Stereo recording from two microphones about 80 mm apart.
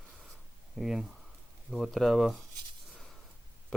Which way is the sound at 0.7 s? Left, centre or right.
Centre.